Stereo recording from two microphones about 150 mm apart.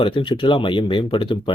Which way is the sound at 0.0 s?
35° left (ahead or behind).